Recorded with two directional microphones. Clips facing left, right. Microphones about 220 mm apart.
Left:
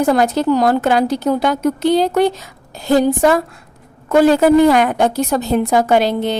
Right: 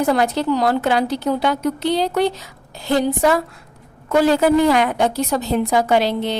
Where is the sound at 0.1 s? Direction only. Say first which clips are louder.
Left 4 dB; 45° left (ahead or behind).